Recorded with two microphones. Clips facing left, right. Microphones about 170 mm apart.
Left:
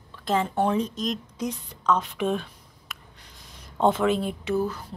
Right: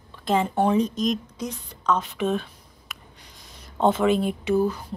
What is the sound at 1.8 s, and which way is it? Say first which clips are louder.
Speech: even; 5° right (ahead or behind).